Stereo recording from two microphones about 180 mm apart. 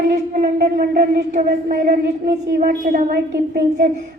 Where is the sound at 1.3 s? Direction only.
45° right (ahead or behind).